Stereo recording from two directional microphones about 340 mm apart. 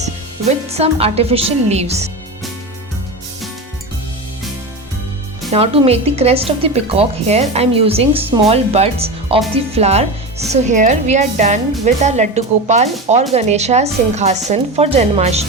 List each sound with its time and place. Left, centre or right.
0.7 s speech: centre
5.5 s speech: centre